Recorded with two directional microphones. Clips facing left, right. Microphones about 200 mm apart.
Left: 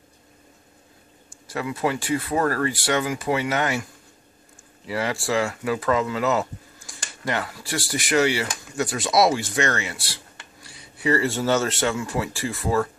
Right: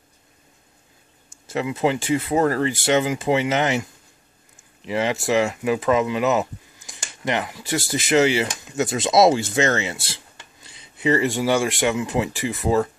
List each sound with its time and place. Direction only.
1.5 s speech: 20° right (ahead or behind)